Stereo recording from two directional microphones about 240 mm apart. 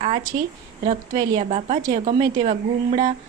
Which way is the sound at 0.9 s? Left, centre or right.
Right.